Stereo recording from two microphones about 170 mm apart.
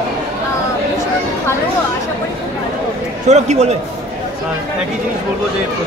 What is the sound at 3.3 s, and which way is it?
Speech, 40° right (ahead or behind).